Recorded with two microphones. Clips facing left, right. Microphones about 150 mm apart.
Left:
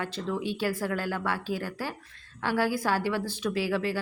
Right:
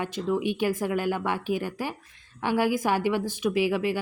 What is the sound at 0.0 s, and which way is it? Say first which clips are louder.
Speech: right 5 dB; 15° right (ahead or behind).